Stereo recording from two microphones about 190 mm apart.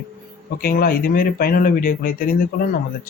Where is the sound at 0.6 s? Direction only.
50° left (ahead or behind).